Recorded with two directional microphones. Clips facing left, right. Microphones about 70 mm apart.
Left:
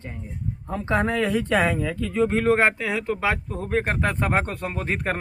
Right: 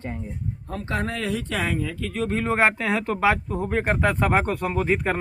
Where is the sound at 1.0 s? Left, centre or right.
Left.